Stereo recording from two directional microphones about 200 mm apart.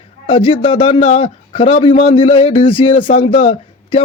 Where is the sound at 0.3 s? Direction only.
25° left (ahead or behind).